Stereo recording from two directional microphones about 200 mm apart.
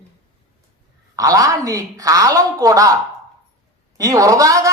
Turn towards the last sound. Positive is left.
turn(degrees=-15)  # may be behind; listen again after turning